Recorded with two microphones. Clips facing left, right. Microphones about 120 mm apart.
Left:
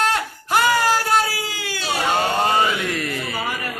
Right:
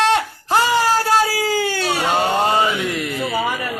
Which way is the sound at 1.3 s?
45° right (ahead or behind).